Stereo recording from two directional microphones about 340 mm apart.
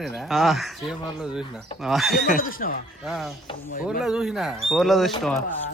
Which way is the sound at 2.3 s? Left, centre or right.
Left.